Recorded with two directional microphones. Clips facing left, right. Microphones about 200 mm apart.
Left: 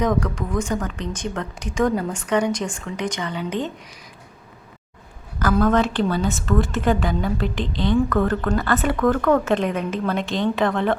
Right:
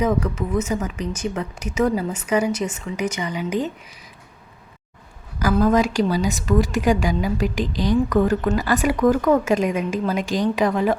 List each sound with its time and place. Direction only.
0.0 s speech: 5° right (ahead or behind)
5.4 s speech: 10° right (ahead or behind)
7.4 s a woman's voice: 25° left (ahead or behind)
8.1 s speech: 15° right (ahead or behind)